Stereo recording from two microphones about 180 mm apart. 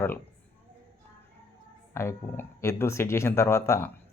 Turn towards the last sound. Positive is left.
turn(degrees=15)  # may be behind; listen again after turning